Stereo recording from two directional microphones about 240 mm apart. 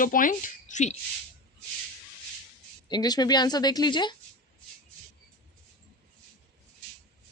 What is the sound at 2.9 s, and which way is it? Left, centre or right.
Speech, centre.